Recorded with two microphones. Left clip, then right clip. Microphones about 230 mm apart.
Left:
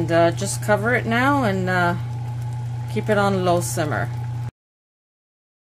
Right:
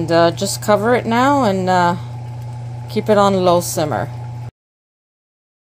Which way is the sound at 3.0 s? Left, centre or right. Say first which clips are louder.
Right 7 dB; centre.